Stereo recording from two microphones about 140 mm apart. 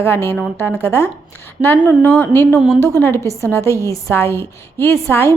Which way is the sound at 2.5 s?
Centre (ahead or behind).